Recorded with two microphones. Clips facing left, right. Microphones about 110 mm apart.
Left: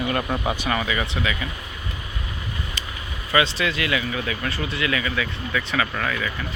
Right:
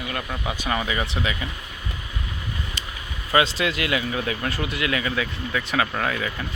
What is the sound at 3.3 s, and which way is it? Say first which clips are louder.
Speech: right 1 dB; 40° right (ahead or behind).